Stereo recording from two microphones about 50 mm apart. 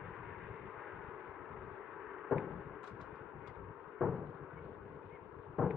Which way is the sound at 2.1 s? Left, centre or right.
Centre.